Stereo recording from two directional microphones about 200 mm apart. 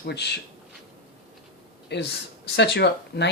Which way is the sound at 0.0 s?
55° left (ahead or behind).